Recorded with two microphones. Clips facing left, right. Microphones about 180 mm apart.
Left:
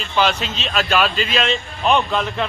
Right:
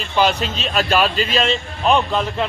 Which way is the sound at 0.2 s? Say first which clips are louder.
Right 2 dB; 40° right (ahead or behind).